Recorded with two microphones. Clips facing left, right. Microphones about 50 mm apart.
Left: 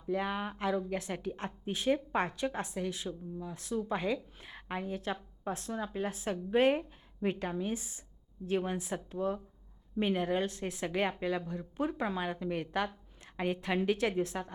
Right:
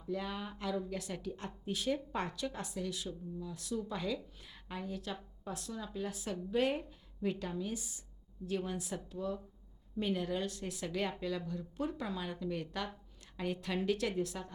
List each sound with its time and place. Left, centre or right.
0.1 s a woman's voice: left